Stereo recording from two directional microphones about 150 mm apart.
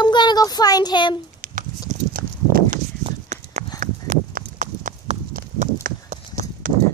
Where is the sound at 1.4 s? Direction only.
60° right (ahead or behind).